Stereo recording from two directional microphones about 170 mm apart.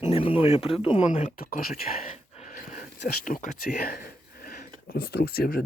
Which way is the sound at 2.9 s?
65° left (ahead or behind).